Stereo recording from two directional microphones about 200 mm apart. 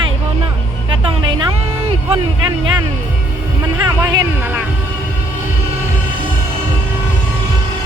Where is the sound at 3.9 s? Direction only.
15° right (ahead or behind).